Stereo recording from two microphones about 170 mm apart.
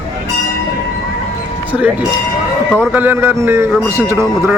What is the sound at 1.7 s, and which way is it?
Speech, 10° right (ahead or behind).